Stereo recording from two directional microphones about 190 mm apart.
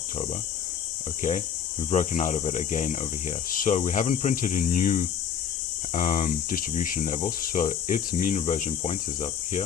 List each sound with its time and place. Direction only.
1.9 s speech: 40° left (ahead or behind)